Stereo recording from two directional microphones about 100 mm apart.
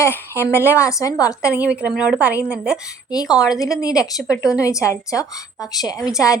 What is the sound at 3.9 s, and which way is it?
Speech, 5° right (ahead or behind).